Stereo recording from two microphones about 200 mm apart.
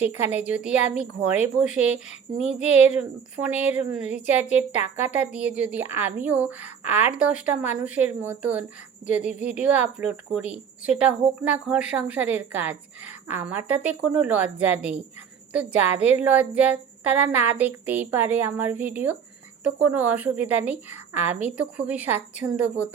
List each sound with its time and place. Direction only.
0.0 s a woman's voice: 10° right (ahead or behind)